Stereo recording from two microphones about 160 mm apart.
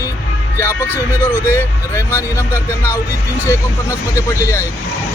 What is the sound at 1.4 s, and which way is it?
Speech, 15° left (ahead or behind).